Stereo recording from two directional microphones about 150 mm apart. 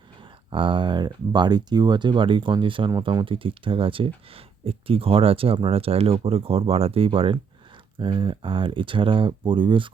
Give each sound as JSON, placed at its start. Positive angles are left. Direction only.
{"t": 0.5, "sound": "speech", "side_deg": -35}